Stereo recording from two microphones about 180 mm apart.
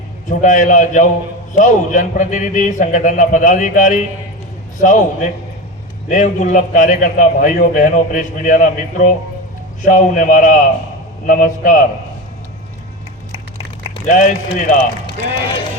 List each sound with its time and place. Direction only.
0.3 s a man's voice: 45° left (ahead or behind)
14.1 s a man's voice: 45° left (ahead or behind)